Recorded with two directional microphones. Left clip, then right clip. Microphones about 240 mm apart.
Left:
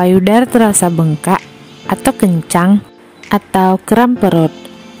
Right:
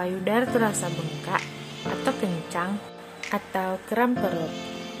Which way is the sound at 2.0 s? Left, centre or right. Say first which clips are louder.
Left 14 dB; left.